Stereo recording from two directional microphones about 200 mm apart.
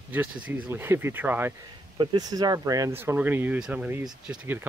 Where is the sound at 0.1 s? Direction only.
10° right (ahead or behind).